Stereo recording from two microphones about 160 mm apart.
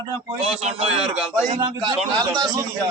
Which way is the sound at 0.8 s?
5° right (ahead or behind).